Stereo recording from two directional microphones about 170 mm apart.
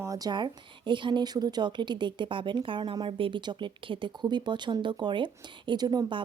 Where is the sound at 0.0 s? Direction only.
20° right (ahead or behind).